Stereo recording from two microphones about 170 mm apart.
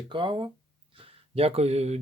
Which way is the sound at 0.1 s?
30° right (ahead or behind).